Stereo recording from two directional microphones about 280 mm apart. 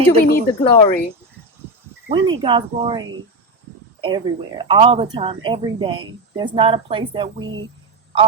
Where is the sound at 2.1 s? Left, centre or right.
Centre.